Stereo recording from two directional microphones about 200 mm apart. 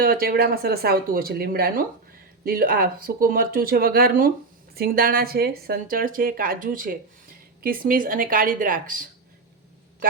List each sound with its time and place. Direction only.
0.0 s a woman's voice: 50° right (ahead or behind)